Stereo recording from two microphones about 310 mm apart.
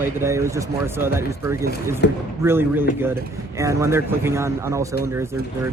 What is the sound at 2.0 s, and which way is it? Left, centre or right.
Speech, left.